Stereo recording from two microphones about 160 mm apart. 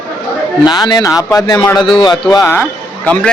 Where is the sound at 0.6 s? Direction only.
25° left (ahead or behind).